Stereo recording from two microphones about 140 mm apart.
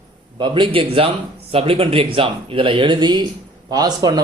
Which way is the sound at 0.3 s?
35° right (ahead or behind).